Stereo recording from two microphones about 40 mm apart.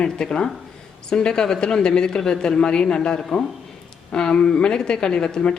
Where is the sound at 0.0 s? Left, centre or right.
Left.